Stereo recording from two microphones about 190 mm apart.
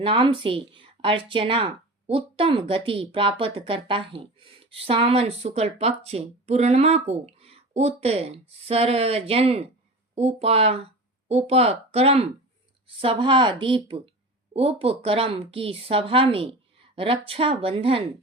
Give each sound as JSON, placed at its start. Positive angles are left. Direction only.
{"t": 0.0, "sound": "speech", "side_deg": -25}